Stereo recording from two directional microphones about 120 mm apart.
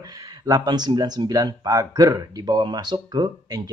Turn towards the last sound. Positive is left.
turn(degrees=-35)  # may be behind; listen again after turning